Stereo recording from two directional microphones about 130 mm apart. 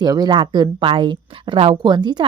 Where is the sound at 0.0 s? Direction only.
30° right (ahead or behind).